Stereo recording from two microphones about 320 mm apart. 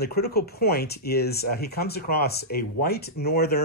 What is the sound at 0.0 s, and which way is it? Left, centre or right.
Speech, left.